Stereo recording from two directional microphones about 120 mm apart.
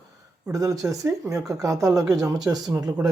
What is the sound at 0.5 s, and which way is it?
Speech, 30° right (ahead or behind).